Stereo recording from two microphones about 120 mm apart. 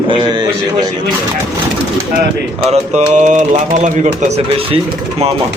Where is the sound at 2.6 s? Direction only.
80° right.